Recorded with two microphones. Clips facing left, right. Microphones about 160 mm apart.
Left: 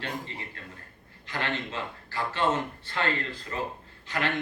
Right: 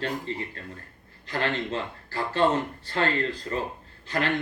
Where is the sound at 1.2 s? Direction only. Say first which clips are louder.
Right 4 dB; 35° right (ahead or behind).